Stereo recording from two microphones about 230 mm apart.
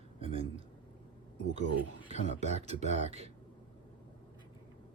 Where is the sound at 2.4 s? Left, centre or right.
Right.